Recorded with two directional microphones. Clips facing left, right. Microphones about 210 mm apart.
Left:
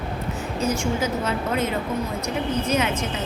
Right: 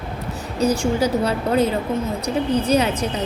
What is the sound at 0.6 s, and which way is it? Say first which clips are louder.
A woman's voice: right 6 dB; 35° right (ahead or behind).